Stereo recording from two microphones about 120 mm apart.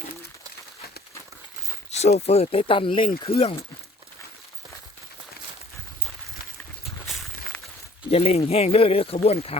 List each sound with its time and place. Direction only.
1.9 s speech: 65° left (ahead or behind)
8.1 s speech: 60° left (ahead or behind)